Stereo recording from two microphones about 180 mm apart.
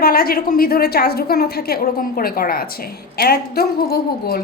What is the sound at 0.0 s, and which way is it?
A woman's voice, 55° left (ahead or behind).